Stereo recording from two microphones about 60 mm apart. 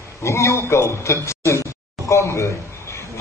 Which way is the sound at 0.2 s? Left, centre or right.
Left.